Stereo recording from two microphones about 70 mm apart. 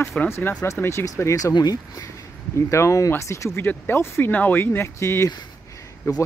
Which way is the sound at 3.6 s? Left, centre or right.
Left.